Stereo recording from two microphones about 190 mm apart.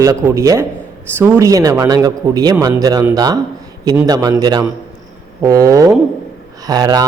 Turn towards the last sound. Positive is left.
turn(degrees=-20)  # may be behind; listen again after turning